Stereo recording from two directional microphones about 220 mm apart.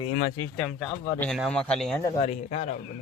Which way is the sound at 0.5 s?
5° left (ahead or behind).